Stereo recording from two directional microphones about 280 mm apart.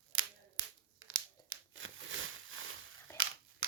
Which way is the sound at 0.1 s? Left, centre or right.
Right.